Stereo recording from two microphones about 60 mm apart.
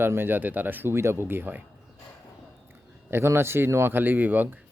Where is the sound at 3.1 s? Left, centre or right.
Right.